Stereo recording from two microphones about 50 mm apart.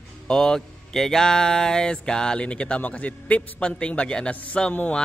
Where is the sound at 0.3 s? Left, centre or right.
Centre.